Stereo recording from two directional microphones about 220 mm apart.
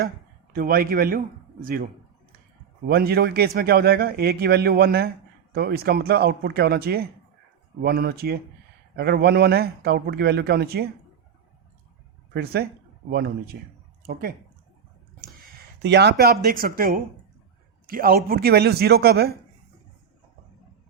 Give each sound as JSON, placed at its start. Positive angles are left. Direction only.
{"t": 0.5, "sound": "a man's voice", "side_deg": -40}
{"t": 2.9, "sound": "a man's voice", "side_deg": -45}
{"t": 12.3, "sound": "a man's voice", "side_deg": -45}
{"t": 14.1, "sound": "a man's voice", "side_deg": -40}
{"t": 15.8, "sound": "a man's voice", "side_deg": -50}